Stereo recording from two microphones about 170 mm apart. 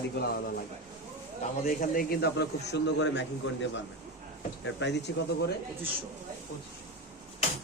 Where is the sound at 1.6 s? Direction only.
55° left (ahead or behind); by 5.1 s 90° left.